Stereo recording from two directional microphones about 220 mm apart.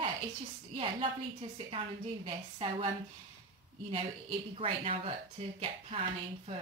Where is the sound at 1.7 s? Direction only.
25° right (ahead or behind).